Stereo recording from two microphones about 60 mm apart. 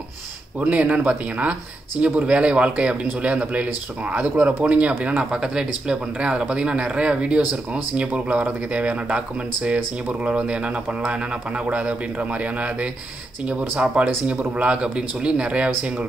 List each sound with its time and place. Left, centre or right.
0.6 s speech: right
5.3 s speech: centre